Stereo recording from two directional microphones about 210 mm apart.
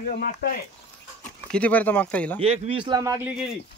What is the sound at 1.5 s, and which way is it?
Speech, 5° left (ahead or behind).